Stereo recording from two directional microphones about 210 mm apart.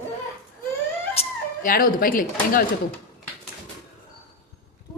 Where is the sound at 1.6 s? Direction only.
45° left (ahead or behind).